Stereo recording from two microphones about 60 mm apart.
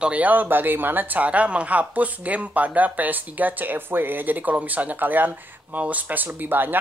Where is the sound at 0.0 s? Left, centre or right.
Right.